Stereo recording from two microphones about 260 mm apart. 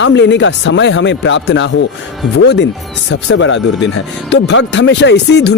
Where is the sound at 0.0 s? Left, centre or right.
Left.